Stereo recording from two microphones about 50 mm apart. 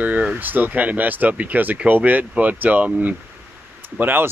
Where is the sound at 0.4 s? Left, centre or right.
Right.